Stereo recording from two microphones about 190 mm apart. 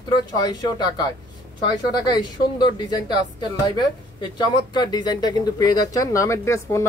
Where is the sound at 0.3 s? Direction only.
20° left (ahead or behind).